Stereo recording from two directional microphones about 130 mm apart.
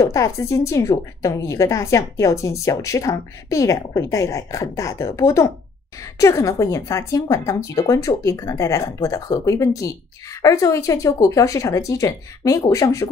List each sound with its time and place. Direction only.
0.0 s a woman's voice: 25° left (ahead or behind)